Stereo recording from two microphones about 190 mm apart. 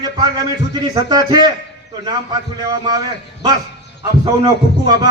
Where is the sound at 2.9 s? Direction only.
20° right (ahead or behind).